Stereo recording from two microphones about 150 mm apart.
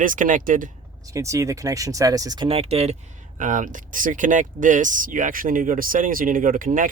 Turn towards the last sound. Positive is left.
turn(degrees=-65)  # may be behind; listen again after turning